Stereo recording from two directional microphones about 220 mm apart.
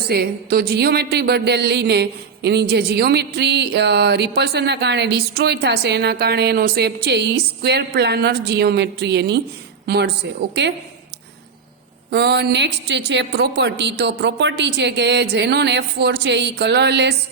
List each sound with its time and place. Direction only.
0.1 s a woman's voice: 45° right (ahead or behind)
12.1 s a woman's voice: 50° right (ahead or behind)